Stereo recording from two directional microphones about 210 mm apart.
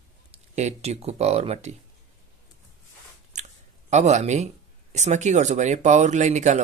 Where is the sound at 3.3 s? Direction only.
35° right (ahead or behind).